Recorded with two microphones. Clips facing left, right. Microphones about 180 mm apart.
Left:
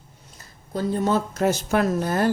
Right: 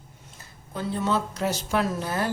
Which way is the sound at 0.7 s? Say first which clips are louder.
Left 4 dB; 40° left (ahead or behind).